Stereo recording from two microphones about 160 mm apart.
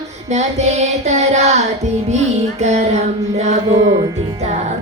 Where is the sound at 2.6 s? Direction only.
45° right (ahead or behind).